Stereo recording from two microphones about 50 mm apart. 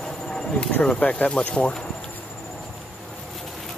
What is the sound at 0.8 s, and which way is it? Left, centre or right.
Speech, left.